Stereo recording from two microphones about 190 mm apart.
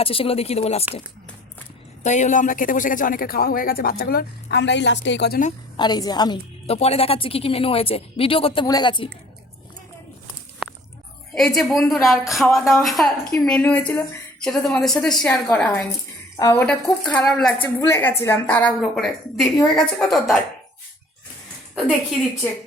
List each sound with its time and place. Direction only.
0.0 s speech: 30° left (ahead or behind)
2.0 s speech: 40° left (ahead or behind); by 5.4 s 65° left (ahead or behind)
5.7 s a woman's voice: 20° left (ahead or behind)
11.3 s a woman's voice: centre (ahead or behind)